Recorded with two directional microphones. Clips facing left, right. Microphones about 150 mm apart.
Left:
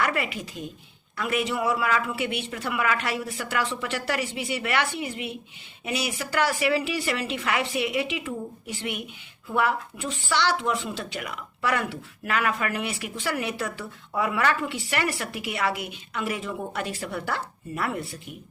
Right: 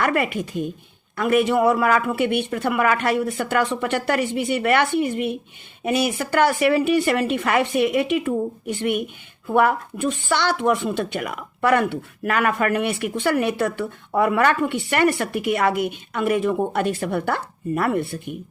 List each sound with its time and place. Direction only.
0.0 s speech: 50° right (ahead or behind)